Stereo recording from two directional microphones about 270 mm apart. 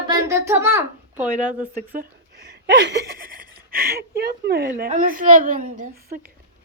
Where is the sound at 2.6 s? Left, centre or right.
Right.